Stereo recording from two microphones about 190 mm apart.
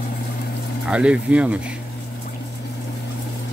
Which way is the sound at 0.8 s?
5° right (ahead or behind).